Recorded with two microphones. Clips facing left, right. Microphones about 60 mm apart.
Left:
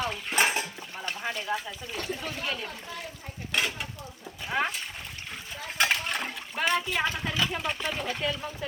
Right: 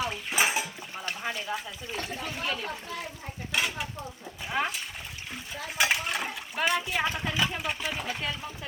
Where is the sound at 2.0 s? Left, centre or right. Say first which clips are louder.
Left 1 dB; centre.